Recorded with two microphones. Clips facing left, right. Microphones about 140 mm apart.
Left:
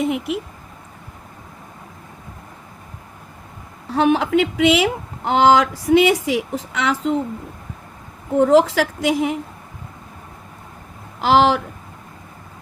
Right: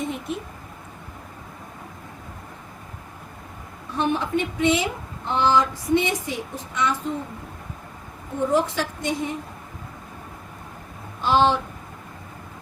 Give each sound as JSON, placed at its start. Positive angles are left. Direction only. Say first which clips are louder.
{"t": 0.0, "sound": "speech", "louder": "left 7 dB", "side_deg": 80}
{"t": 3.8, "sound": "speech", "louder": "left 7 dB", "side_deg": 90}
{"t": 8.4, "sound": "speech", "louder": "left 8 dB", "side_deg": 90}
{"t": 11.2, "sound": "speech", "louder": "left 4 dB", "side_deg": 85}